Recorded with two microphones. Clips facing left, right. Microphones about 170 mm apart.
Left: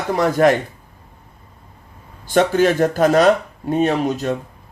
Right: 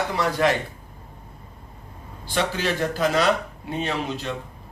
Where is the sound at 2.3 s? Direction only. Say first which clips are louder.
Left 10 dB; 50° left (ahead or behind).